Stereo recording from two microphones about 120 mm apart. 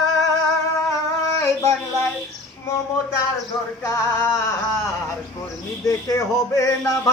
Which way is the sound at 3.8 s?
25° left (ahead or behind).